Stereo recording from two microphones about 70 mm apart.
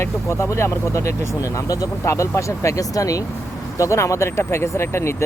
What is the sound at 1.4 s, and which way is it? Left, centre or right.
Speech, left.